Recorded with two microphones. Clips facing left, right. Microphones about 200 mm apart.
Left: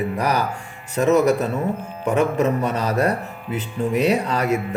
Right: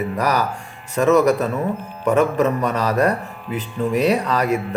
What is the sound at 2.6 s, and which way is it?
Speech, 30° left (ahead or behind).